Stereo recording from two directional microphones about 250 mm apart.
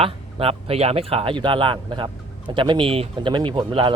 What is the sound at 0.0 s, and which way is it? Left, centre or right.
Speech, right.